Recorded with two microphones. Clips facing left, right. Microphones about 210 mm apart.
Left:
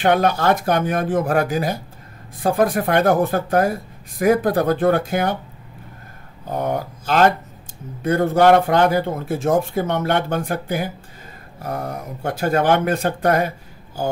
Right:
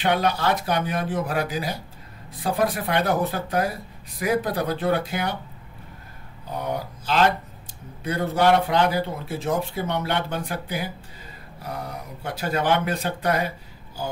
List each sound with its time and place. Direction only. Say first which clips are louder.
0.0 s a man's voice: left 5 dB; 50° left (ahead or behind)
6.5 s a man's voice: left 6 dB; 50° left (ahead or behind)